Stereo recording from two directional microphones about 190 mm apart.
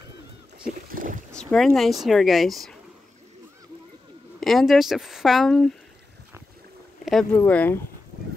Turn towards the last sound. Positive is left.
turn(degrees=10)  # may be behind; listen again after turning